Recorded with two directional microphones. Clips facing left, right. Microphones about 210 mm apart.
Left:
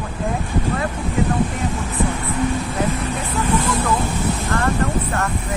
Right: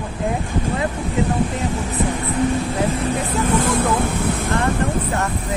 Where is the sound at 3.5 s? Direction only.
50° right (ahead or behind).